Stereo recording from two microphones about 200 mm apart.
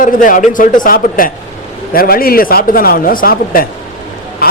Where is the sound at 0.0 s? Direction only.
40° left (ahead or behind).